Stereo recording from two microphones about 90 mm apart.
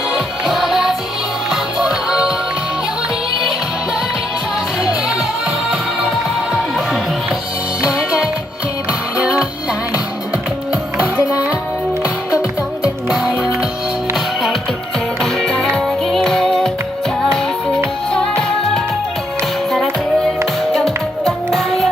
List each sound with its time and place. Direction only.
0.1 s music: centre (ahead or behind)
4.8 s music: 10° right (ahead or behind)
10.7 s music: 10° right (ahead or behind)
12.0 s music: 35° left (ahead or behind)
12.8 s music: 5° right (ahead or behind)
15.2 s music: 5° left (ahead or behind)
18.1 s music: 10° left (ahead or behind)